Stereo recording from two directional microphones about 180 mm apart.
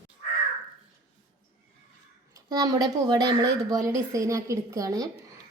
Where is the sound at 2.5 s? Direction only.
20° right (ahead or behind).